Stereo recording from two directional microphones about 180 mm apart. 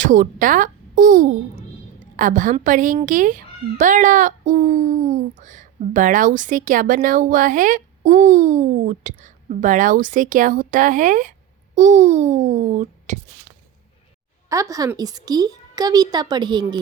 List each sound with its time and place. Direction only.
0.0 s a child's voice: 45° right (ahead or behind)
14.5 s a woman's voice: 20° right (ahead or behind)